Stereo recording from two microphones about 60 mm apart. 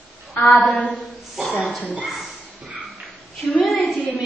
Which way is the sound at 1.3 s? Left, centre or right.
Centre.